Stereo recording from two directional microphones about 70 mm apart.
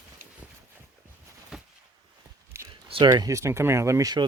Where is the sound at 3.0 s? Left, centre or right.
Right.